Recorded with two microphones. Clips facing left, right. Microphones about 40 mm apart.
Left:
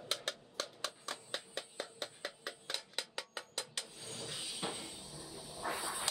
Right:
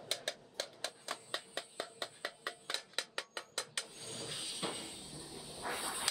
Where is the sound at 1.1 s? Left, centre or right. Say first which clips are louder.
Right 1 dB; centre.